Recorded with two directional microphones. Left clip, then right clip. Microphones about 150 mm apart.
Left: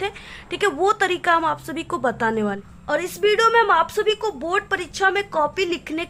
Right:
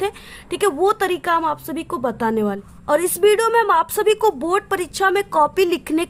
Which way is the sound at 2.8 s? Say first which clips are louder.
Right 5 dB; 45° right (ahead or behind).